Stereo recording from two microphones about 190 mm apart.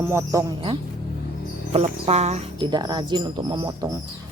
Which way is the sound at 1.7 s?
35° right (ahead or behind).